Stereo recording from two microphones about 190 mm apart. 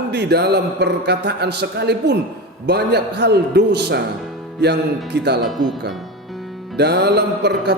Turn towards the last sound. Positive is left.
turn(degrees=-60)  # may be behind; listen again after turning